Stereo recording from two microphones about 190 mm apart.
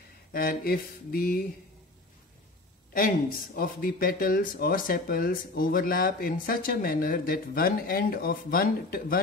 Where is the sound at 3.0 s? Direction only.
50° left (ahead or behind).